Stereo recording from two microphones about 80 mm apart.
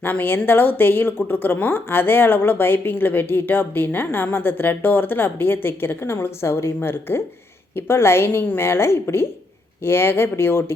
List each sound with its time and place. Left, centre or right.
0.0 s a woman's voice: left